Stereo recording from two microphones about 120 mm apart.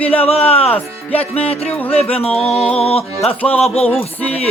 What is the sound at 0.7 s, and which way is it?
Speech, 15° left (ahead or behind).